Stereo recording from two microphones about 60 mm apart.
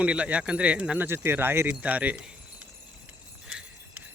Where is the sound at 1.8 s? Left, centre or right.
Right.